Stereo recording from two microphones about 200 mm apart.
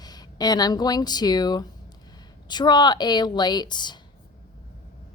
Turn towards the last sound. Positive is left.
turn(degrees=20)  # may be behind; listen again after turning